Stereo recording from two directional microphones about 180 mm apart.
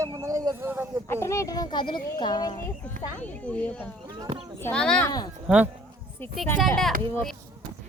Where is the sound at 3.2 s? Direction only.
10° left (ahead or behind).